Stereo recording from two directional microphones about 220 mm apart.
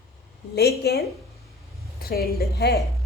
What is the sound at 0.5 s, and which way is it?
A woman's voice, 45° left (ahead or behind).